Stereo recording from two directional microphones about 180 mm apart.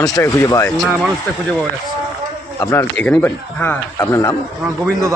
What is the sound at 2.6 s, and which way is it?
A man's voice, 15° left (ahead or behind).